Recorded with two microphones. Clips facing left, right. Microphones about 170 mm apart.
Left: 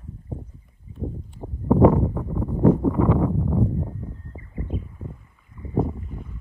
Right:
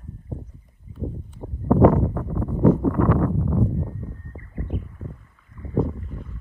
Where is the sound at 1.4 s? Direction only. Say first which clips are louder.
Even; 10° left (ahead or behind).